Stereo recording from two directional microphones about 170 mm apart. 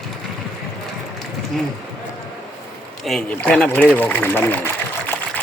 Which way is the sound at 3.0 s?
5° left (ahead or behind).